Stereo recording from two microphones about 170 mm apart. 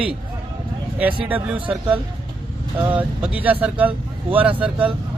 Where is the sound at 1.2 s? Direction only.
10° right (ahead or behind).